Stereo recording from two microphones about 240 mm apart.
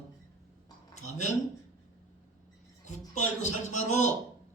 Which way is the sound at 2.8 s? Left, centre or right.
Left.